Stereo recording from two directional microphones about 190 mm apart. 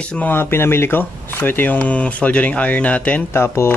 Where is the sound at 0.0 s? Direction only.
5° left (ahead or behind).